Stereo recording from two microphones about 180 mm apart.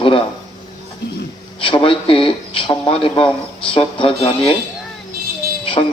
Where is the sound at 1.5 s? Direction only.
30° left (ahead or behind).